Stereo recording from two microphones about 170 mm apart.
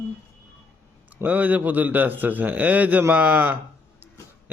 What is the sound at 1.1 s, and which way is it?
A man's voice, 10° right (ahead or behind).